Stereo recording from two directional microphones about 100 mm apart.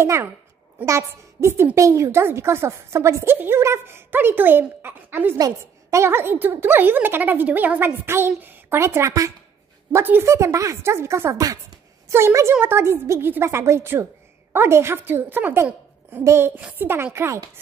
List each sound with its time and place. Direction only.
0.0 s a woman's voice: 30° right (ahead or behind)